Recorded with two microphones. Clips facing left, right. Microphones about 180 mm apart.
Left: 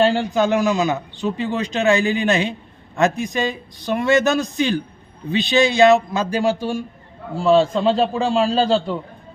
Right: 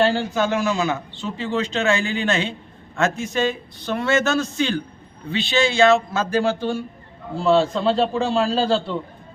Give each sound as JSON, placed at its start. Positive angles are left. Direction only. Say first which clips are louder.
{"t": 0.0, "sound": "a man's voice", "louder": "left 3 dB", "side_deg": 15}